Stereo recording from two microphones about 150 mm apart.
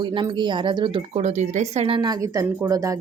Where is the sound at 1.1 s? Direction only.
50° right (ahead or behind); by 2.9 s 20° right (ahead or behind).